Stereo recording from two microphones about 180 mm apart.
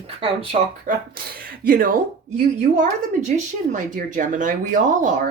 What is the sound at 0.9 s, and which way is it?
Speech, 45° right (ahead or behind).